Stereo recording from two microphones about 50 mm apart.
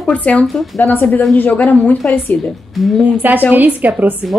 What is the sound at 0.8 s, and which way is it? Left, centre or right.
A woman's voice, left.